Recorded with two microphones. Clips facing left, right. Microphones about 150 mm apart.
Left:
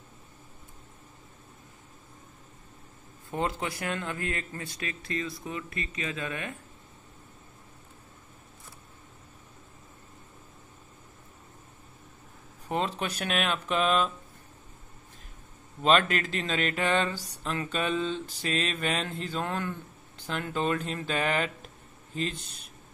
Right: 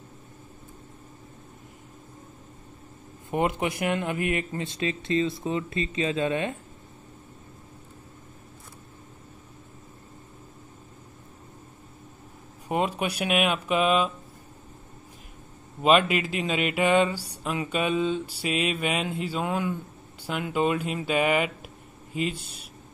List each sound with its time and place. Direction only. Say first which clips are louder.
3.3 s speech: right 5 dB; 20° right (ahead or behind)
12.6 s speech: right 4 dB; 10° right (ahead or behind)
15.8 s speech: right 3 dB; 10° right (ahead or behind)